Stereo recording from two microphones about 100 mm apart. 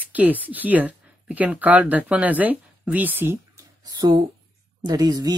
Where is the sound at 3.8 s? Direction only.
40° right (ahead or behind).